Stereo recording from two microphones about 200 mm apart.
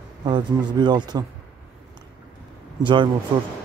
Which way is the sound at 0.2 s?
20° right (ahead or behind).